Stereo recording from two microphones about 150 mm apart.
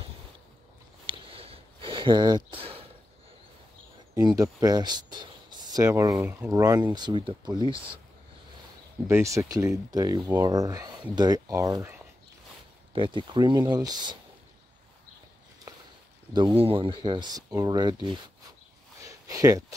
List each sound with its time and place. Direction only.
1.0 s a sound: 40° right (ahead or behind)
4.1 s speech: 25° right (ahead or behind)
9.0 s speech: 20° right (ahead or behind)
12.9 s speech: 30° right (ahead or behind)
15.7 s walk: 25° right (ahead or behind)
16.6 s speech: 35° right (ahead or behind)
19.0 s a sound: 20° right (ahead or behind)